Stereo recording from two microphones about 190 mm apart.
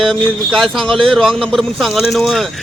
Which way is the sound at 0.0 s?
Centre (ahead or behind).